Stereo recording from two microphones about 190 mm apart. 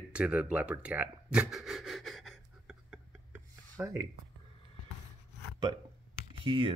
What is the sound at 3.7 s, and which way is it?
Speech, 15° right (ahead or behind).